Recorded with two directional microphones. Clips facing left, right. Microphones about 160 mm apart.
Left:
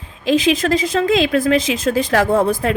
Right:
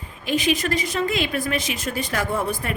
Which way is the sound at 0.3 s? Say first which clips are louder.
Left 7 dB; 90° left.